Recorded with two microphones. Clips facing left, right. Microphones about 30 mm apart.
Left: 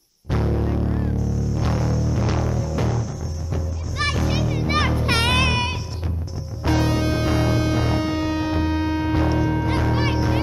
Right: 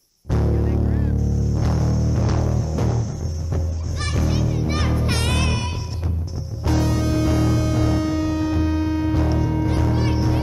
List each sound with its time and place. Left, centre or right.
0.3 s music: left
0.7 s music: centre
1.6 s music: centre
4.6 s music: left